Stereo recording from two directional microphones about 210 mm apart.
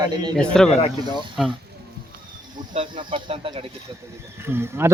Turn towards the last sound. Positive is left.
turn(degrees=-10)  # may be behind; listen again after turning